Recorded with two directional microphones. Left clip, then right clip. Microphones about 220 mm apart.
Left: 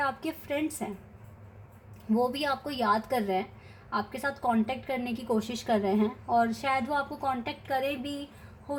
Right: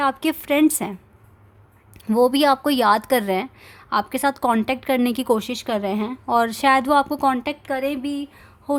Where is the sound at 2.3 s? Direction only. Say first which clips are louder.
Right 13 dB; 50° right (ahead or behind).